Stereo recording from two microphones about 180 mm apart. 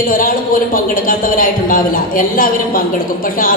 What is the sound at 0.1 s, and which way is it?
Speech, 50° left (ahead or behind).